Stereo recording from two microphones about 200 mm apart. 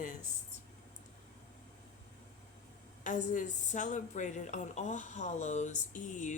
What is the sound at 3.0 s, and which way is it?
Speech, 40° left (ahead or behind).